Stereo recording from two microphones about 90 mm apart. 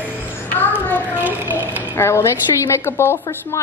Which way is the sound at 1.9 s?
30° left (ahead or behind).